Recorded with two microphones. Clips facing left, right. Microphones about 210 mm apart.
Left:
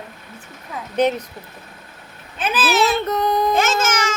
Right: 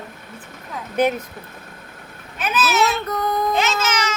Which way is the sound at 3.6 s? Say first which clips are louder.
Left 2 dB; 50° left (ahead or behind).